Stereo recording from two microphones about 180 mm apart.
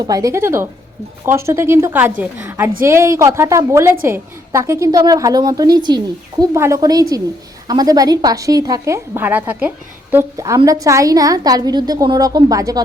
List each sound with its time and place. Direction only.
0.0 s a woman's voice: 20° right (ahead or behind)